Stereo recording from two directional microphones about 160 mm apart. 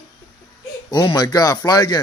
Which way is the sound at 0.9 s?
25° left (ahead or behind).